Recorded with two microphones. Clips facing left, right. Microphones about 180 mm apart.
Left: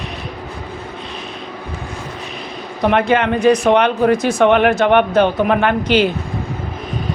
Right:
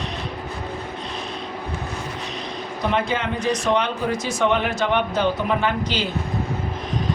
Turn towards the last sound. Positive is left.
turn(degrees=65)  # may be behind; listen again after turning